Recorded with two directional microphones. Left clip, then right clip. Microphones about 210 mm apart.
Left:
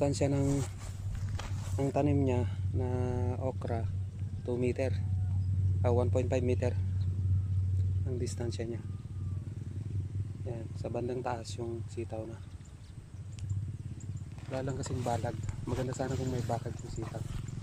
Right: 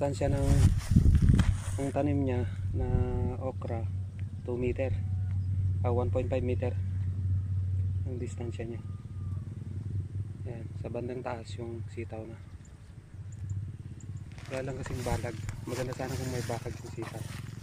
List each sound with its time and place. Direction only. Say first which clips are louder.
0.0 s speech: even; 25° left (ahead or behind)
0.5 s a sound: right 2 dB; 45° right (ahead or behind)
1.8 s speech: even; 20° left (ahead or behind)
8.2 s speech: left 2 dB; 25° left (ahead or behind)
10.5 s speech: left 1 dB; 20° left (ahead or behind)
14.5 s speech: right 1 dB; 10° left (ahead or behind)
15.7 s speech: even; 50° right (ahead or behind)